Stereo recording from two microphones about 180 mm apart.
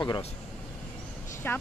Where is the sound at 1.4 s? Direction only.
10° left (ahead or behind).